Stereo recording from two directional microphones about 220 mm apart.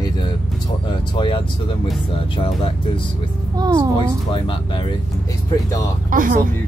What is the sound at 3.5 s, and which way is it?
Speech, 15° right (ahead or behind).